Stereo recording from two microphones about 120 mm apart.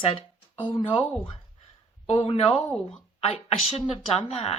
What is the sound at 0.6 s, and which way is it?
Speech, 50° left (ahead or behind).